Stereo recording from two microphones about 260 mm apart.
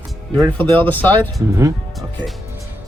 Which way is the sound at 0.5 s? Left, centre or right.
Centre.